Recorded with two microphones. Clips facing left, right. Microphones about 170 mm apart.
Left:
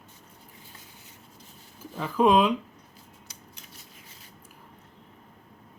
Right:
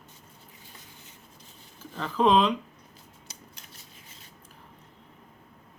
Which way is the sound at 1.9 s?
10° left (ahead or behind).